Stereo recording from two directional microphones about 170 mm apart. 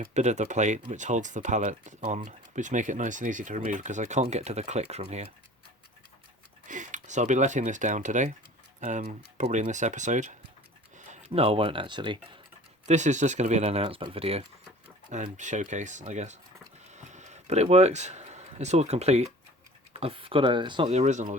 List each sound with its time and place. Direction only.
0.1 s speech: 45° right (ahead or behind)
6.7 s speech: 45° right (ahead or behind)
11.3 s speech: 35° right (ahead or behind)
12.8 s speech: 45° right (ahead or behind)
15.1 s speech: 45° right (ahead or behind)
16.9 s a sound: 45° right (ahead or behind)
19.9 s speech: 35° right (ahead or behind)
20.8 s speech: 40° right (ahead or behind)